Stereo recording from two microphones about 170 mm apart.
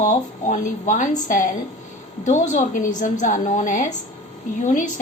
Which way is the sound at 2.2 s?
45° left (ahead or behind).